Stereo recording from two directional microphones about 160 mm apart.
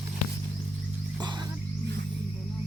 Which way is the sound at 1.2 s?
25° right (ahead or behind).